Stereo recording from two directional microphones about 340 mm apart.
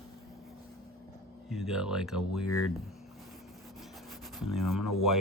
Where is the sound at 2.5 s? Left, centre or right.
Left.